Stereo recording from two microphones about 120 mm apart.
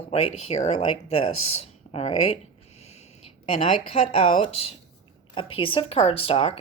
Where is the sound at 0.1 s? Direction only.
60° left (ahead or behind).